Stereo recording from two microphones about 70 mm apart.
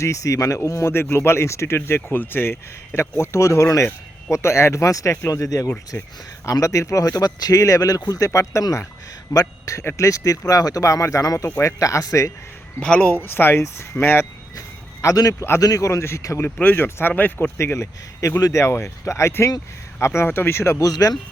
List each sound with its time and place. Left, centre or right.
0.0 s speech: left
5.9 s speech: left
6.4 s speech: left
9.3 s speech: left
9.7 s speech: left
12.8 s speech: centre; by 14.3 s left
15.0 s speech: left
16.4 s speech: left
17.6 s speech: left
20.9 s speech: left